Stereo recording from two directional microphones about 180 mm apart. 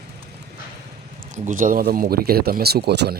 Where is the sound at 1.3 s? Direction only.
45° right (ahead or behind); by 3.2 s 65° right (ahead or behind).